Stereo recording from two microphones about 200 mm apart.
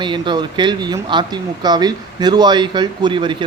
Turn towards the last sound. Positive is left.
turn(degrees=-25)  # may be behind; listen again after turning